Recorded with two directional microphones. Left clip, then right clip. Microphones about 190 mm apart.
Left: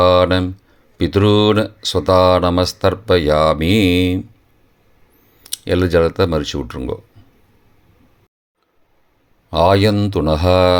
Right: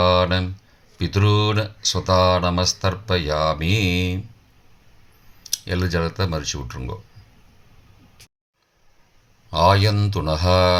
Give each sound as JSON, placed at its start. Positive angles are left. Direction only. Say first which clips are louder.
{"t": 0.0, "sound": "speech", "louder": "left 6 dB", "side_deg": 45}
{"t": 5.5, "sound": "speech", "louder": "left 8 dB", "side_deg": 50}
{"t": 9.5, "sound": "speech", "louder": "left 4 dB", "side_deg": 45}